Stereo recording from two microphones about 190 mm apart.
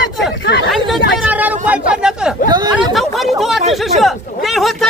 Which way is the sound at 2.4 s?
20° right (ahead or behind).